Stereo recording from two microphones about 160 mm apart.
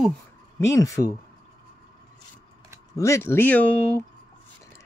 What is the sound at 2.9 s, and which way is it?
Speech, 20° left (ahead or behind).